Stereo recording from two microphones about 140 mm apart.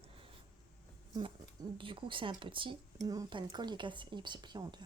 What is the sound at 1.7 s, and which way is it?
Speech, 35° right (ahead or behind).